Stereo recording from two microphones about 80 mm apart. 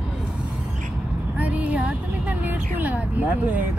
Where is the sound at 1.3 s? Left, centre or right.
Centre.